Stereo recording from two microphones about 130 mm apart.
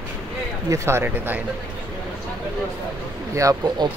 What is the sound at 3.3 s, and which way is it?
Speech, 25° right (ahead or behind).